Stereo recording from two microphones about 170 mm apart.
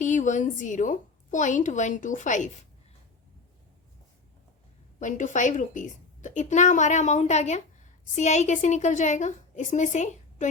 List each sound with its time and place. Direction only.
0.0 s a woman's voice: 45° left (ahead or behind)
4.9 s a woman's voice: 50° left (ahead or behind)